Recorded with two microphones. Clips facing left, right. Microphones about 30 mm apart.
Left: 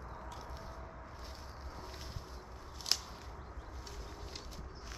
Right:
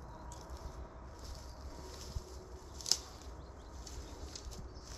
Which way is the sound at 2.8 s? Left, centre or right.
Left.